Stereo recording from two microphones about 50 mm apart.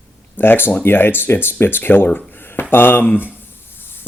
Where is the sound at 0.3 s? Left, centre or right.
Left.